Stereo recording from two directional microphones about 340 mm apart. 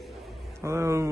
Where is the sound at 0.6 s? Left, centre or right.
Centre.